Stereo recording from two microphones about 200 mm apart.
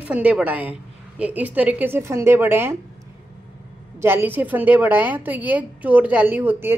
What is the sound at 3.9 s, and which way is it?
A woman's voice, 10° right (ahead or behind).